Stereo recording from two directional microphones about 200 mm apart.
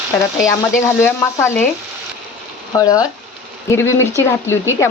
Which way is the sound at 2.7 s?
20° left (ahead or behind).